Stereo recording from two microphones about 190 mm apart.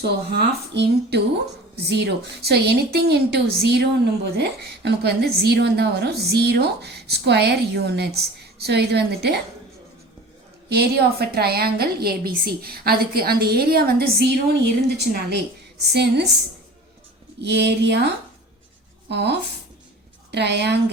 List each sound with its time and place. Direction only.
0.0 s a woman's voice: 60° right (ahead or behind)
10.7 s a woman's voice: 55° right (ahead or behind)
17.4 s a woman's voice: 65° right (ahead or behind)